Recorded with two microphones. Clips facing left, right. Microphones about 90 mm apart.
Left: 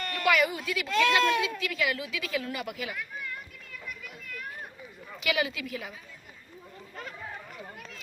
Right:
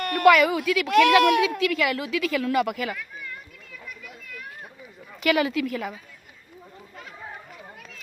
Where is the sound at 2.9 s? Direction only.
5° left (ahead or behind).